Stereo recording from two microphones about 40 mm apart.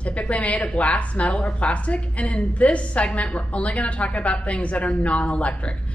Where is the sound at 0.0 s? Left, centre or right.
Left.